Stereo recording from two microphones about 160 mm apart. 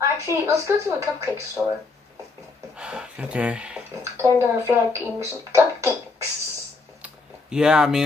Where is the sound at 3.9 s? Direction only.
20° right (ahead or behind).